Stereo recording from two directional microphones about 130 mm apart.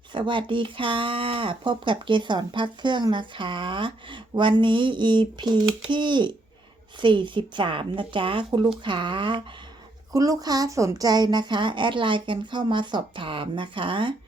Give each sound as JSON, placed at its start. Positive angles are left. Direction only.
{"t": 0.1, "sound": "speech", "side_deg": -40}
{"t": 10.1, "sound": "speech", "side_deg": -30}